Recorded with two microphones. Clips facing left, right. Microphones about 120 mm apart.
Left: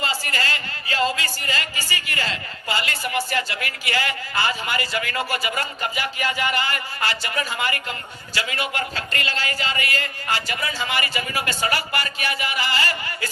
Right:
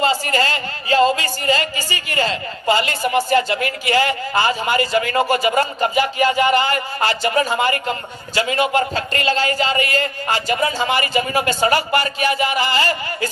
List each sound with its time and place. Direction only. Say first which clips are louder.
0.0 s a woman's voice: right 9 dB; 25° right (ahead or behind)